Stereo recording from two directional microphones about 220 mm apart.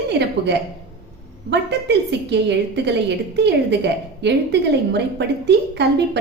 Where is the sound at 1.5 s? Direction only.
50° right (ahead or behind).